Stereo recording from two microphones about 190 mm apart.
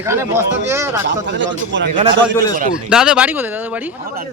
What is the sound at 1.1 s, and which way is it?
Speech, 70° right (ahead or behind).